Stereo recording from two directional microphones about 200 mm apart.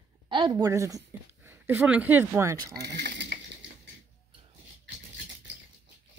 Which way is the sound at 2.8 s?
55° right (ahead or behind).